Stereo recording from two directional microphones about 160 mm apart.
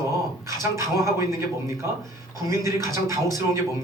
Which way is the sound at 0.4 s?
20° right (ahead or behind).